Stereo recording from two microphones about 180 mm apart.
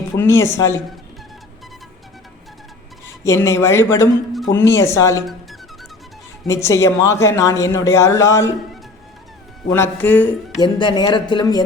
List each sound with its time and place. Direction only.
0.2 s speech: 15° left (ahead or behind)
3.2 s speech: 15° left (ahead or behind)
6.5 s speech: 15° left (ahead or behind)
9.6 s speech: 15° left (ahead or behind)
10.6 s speech: 25° left (ahead or behind)